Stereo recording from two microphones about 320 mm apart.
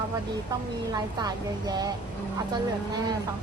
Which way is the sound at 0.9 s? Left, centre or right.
Centre.